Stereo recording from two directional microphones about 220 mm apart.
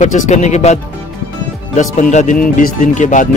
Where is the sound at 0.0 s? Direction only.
30° left (ahead or behind).